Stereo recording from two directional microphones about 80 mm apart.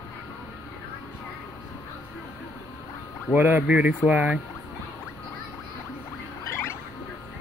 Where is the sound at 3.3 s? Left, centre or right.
Right.